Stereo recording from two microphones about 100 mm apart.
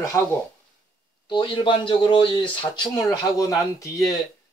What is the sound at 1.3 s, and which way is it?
Speech, 50° left (ahead or behind).